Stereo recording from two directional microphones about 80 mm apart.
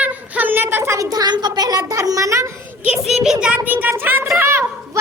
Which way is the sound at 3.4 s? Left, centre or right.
Centre.